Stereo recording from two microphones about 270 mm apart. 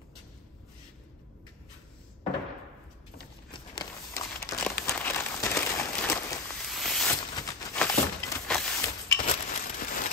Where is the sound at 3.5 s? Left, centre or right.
Centre.